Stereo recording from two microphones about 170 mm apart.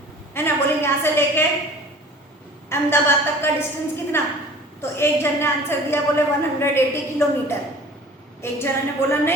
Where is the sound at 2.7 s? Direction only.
15° left (ahead or behind).